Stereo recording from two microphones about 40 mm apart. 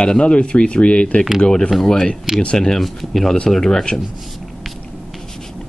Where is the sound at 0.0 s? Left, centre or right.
Left.